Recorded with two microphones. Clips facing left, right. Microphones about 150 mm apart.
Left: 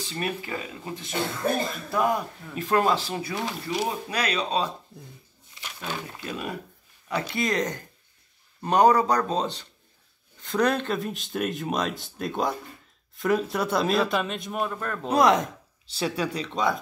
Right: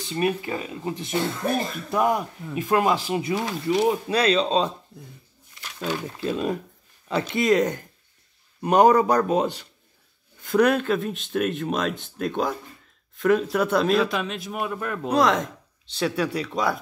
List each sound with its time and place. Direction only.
0.1 s speech: 20° right (ahead or behind)
4.1 s speech: 25° right (ahead or behind)
6.2 s a man's voice: 25° right (ahead or behind); by 15.0 s 10° right (ahead or behind)
15.0 s a man's voice: 5° left (ahead or behind)